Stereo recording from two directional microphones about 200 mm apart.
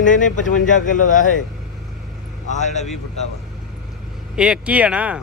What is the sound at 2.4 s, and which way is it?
Speech, 35° left (ahead or behind).